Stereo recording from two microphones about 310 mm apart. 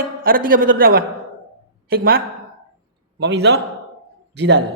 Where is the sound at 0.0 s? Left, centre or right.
Right.